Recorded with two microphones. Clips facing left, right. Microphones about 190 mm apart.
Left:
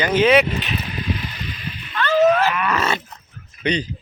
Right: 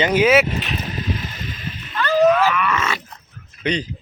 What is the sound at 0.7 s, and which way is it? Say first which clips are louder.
Splash: even; 40° right (ahead or behind).